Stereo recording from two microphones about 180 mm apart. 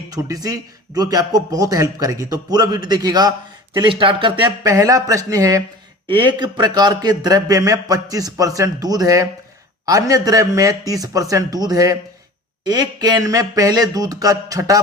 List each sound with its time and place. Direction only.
0.1 s a man's voice: 20° right (ahead or behind)